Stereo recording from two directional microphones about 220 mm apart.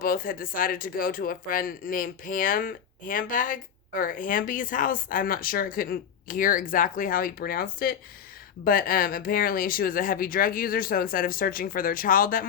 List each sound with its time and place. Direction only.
0.0 s speech: 40° left (ahead or behind)